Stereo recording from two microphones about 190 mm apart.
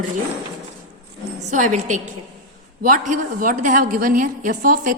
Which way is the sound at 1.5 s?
40° right (ahead or behind).